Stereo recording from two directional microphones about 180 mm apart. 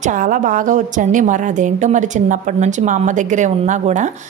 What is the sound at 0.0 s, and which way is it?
A woman's voice, 45° right (ahead or behind).